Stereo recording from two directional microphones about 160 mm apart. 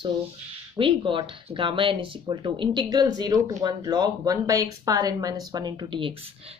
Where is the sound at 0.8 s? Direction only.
30° right (ahead or behind).